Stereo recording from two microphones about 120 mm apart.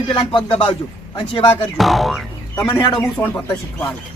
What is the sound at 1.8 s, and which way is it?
Music, centre (ahead or behind).